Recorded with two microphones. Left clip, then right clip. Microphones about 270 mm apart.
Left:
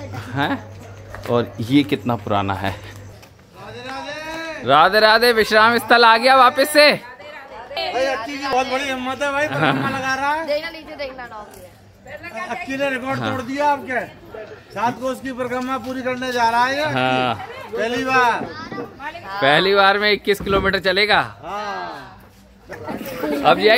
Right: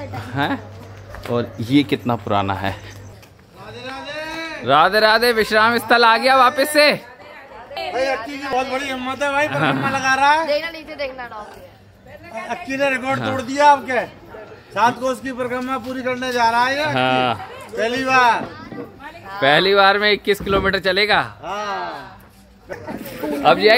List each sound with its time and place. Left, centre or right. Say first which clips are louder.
0.1 s a man's voice: even; centre
1.3 s speech: left 3 dB; centre
1.7 s a man's voice: right 1 dB; centre
7.8 s chatter: even; centre
8.5 s a man's voice: left 1 dB; centre
9.5 s a man's voice: even; centre
10.0 s a woman's voice: right 8 dB; right
10.4 s a woman's voice: right 2 dB; centre
13.4 s a man's voice: right 8 dB; right
15.0 s a man's voice: right 2 dB; centre
19.4 s a man's voice: right 1 dB; centre